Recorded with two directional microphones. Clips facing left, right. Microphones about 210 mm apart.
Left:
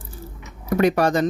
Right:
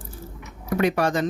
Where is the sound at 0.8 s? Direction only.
40° left (ahead or behind).